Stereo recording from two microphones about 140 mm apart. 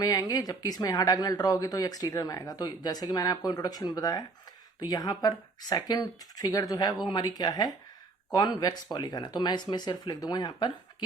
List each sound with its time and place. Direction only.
0.0 s speech: 25° left (ahead or behind)